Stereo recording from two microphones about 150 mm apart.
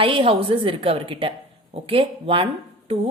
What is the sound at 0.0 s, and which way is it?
A woman's voice, 35° right (ahead or behind).